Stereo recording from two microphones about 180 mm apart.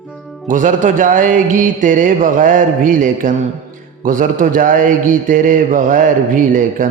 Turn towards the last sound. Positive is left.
turn(degrees=-50)  # may be behind; listen again after turning